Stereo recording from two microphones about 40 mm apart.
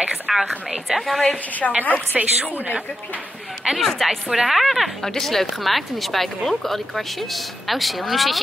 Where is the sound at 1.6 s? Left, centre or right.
Centre.